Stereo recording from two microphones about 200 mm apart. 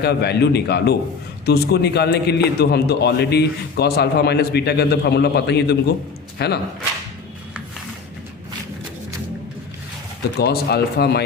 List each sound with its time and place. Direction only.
0.0 s a man's voice: 55° left (ahead or behind)
10.3 s speech: 55° left (ahead or behind)